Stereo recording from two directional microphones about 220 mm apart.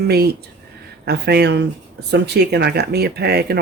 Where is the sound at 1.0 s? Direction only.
50° right (ahead or behind).